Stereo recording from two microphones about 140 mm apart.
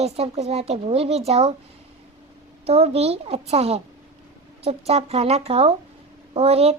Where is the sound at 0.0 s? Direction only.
50° right (ahead or behind).